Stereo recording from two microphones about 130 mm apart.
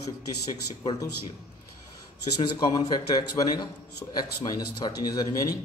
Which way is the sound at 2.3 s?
35° left (ahead or behind).